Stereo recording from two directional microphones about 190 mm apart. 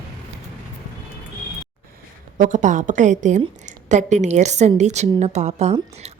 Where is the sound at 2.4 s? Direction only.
40° right (ahead or behind).